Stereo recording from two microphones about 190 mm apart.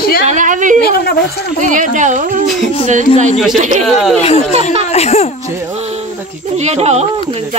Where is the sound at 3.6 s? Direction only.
40° right (ahead or behind).